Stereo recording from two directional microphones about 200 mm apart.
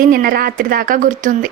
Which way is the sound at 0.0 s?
45° right (ahead or behind).